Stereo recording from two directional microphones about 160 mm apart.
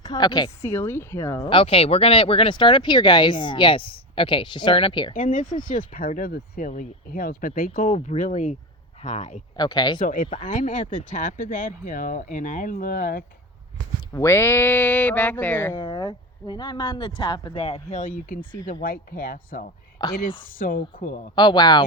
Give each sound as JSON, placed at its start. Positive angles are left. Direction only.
{"t": 0.0, "sound": "speech", "side_deg": 25}
{"t": 1.5, "sound": "speech", "side_deg": 35}
{"t": 5.1, "sound": "speech", "side_deg": 55}
{"t": 9.6, "sound": "speech", "side_deg": 25}
{"t": 10.0, "sound": "speech", "side_deg": 60}
{"t": 14.1, "sound": "speech", "side_deg": 20}
{"t": 15.7, "sound": "speech", "side_deg": 30}
{"t": 18.7, "sound": "speech", "side_deg": 65}
{"t": 20.0, "sound": "speech", "side_deg": 25}
{"t": 20.4, "sound": "speech", "side_deg": 60}
{"t": 21.3, "sound": "speech", "side_deg": 25}